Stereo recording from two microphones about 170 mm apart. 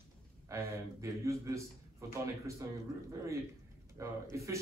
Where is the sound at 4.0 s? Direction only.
15° right (ahead or behind).